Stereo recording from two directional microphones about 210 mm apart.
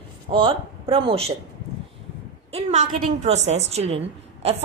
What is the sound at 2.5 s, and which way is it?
A woman's voice, 35° right (ahead or behind).